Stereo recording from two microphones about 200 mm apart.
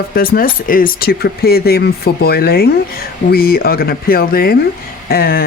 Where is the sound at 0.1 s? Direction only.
45° left (ahead or behind).